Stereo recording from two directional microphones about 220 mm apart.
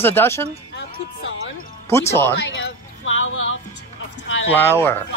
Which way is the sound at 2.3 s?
60° left (ahead or behind).